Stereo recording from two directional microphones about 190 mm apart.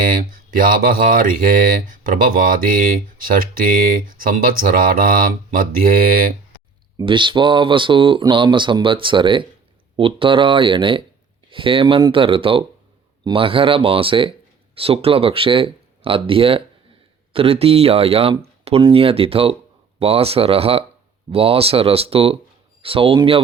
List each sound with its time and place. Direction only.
0.0 s speech: 45° right (ahead or behind)
7.0 s speech: 25° right (ahead or behind)